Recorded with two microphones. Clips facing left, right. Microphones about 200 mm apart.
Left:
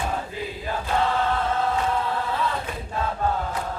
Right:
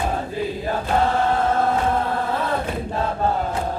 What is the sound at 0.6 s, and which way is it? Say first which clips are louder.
Chant: right 3 dB; 45° right (ahead or behind).